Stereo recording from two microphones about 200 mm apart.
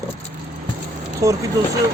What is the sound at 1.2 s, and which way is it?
Speech, 15° right (ahead or behind).